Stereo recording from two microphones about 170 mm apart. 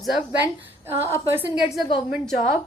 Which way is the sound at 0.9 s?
15° right (ahead or behind).